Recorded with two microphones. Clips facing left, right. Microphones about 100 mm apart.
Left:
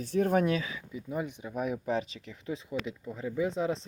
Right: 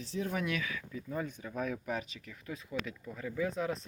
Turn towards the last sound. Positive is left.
turn(degrees=25)  # may be behind; listen again after turning